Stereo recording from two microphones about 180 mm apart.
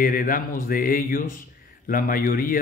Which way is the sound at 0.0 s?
50° left (ahead or behind).